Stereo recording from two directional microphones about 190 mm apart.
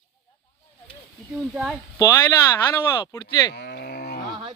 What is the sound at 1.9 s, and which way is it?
Speech, 15° left (ahead or behind).